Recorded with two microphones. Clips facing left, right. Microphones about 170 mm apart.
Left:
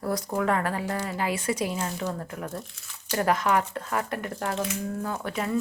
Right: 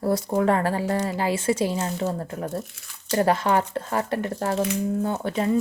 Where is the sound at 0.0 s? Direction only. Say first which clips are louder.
Right 5 dB; 30° right (ahead or behind).